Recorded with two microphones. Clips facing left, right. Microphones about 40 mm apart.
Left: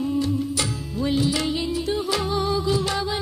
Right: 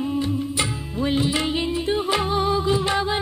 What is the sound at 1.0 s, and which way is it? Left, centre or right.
Music, right.